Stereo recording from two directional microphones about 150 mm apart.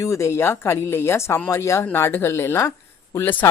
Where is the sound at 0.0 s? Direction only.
20° left (ahead or behind).